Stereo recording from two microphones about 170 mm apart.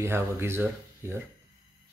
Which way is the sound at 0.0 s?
15° right (ahead or behind).